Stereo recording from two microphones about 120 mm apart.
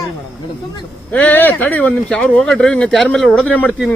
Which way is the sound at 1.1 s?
15° left (ahead or behind).